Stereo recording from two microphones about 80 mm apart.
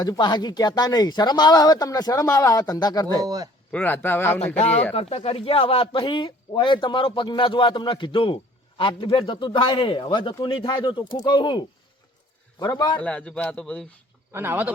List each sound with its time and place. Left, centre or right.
0.0 s speech: left
3.2 s speech: right
3.7 s speech: centre
5.5 s a man's voice: left
12.5 s a man's voice: left
13.0 s speech: centre
14.3 s speech: right